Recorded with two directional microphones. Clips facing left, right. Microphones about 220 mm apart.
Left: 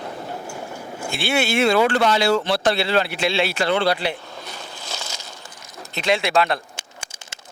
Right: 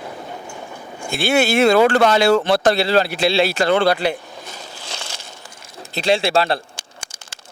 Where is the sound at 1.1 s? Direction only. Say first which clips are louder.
Right 5 dB; 40° right (ahead or behind).